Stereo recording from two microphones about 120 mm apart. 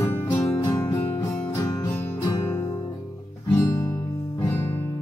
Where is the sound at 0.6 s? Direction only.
30° left (ahead or behind).